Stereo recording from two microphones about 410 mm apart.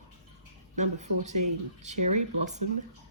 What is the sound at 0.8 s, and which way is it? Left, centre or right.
Speech, centre.